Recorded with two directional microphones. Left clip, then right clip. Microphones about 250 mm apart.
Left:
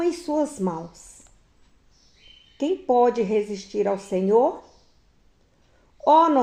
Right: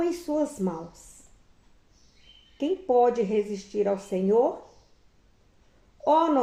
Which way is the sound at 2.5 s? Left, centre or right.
Left.